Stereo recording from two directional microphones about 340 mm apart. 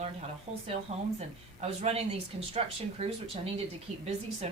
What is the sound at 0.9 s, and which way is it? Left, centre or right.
A woman's voice, centre.